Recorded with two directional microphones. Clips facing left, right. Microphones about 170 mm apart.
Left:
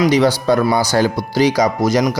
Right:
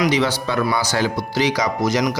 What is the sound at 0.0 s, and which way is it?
Speech, 40° left (ahead or behind).